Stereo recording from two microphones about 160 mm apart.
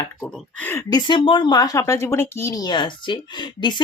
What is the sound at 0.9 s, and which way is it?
Speech, 30° left (ahead or behind).